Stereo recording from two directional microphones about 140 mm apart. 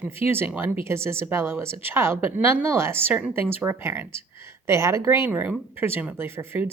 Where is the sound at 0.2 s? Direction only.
15° right (ahead or behind).